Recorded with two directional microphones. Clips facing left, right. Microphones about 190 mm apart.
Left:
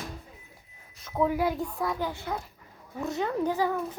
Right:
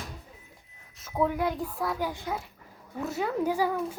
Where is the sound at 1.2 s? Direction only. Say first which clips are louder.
Left 3 dB; 5° left (ahead or behind).